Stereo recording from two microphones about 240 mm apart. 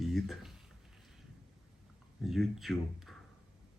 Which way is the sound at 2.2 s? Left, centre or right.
Centre.